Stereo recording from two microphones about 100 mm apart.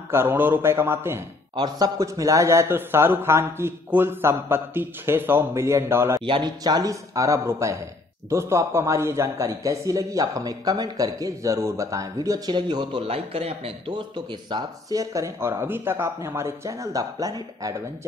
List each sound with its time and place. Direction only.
0.1 s a man's voice: 25° right (ahead or behind)
1.5 s a man's voice: 40° right (ahead or behind); by 6.2 s 25° right (ahead or behind)
6.2 s speech: 55° right (ahead or behind)
6.6 s a man's voice: 40° right (ahead or behind)
13.0 s speech: 75° right (ahead or behind); by 14.6 s 50° right (ahead or behind)
14.9 s a man's voice: 35° right (ahead or behind)